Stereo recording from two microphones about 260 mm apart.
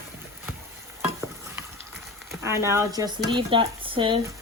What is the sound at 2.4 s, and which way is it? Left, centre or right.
Speech, centre.